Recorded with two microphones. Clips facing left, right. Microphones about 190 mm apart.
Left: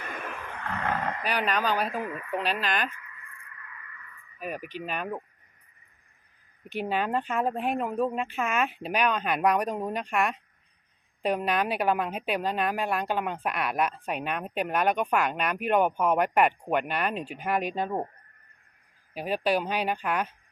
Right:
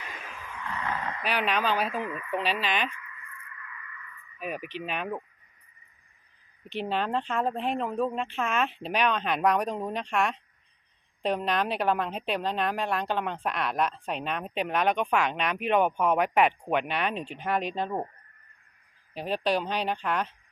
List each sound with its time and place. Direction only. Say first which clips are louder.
0.0 s a sound: left 5 dB; 55° left (ahead or behind)
1.6 s speech: even; 5° left (ahead or behind)
4.8 s speech: even; centre (ahead or behind)
6.7 s speech: left 1 dB; 5° left (ahead or behind)
19.1 s speech: left 1 dB; 10° left (ahead or behind)